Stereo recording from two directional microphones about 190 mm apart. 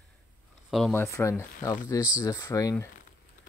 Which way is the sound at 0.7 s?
Centre (ahead or behind).